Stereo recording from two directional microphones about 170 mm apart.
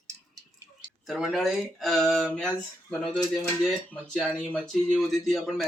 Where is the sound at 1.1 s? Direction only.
Centre (ahead or behind).